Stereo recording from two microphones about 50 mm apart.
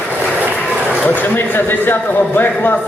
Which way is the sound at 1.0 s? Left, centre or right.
Left.